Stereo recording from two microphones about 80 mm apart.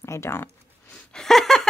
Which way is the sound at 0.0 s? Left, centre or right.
Left.